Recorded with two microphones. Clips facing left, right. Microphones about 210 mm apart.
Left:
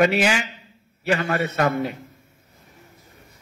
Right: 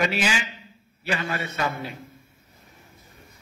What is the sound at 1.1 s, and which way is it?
Speech, 65° left (ahead or behind).